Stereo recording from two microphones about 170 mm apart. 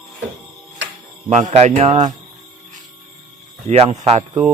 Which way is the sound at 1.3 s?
40° right (ahead or behind).